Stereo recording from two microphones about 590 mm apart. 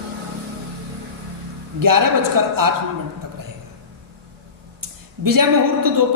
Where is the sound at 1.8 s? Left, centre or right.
Right.